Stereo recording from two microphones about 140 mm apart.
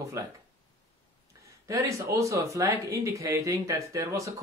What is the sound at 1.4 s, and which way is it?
Speech, 25° right (ahead or behind).